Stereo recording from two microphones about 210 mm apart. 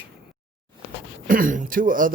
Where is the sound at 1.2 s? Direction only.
40° right (ahead or behind).